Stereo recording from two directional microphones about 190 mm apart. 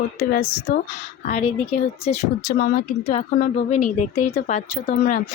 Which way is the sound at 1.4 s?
35° left (ahead or behind).